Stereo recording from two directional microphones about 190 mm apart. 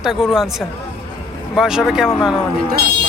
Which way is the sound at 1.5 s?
Centre (ahead or behind).